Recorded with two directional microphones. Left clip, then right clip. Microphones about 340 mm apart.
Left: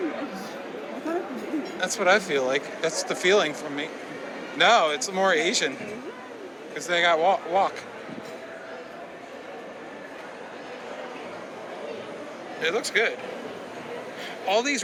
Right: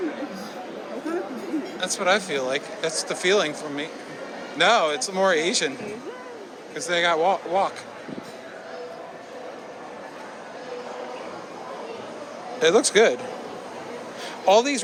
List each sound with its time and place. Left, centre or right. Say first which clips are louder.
1.8 s speech: left 1 dB; centre
6.7 s speech: even; centre
12.6 s speech: right 7 dB; centre
14.4 s speech: right 6 dB; centre